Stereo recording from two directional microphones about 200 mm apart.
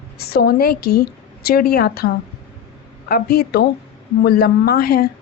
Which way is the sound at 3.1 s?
50° left (ahead or behind).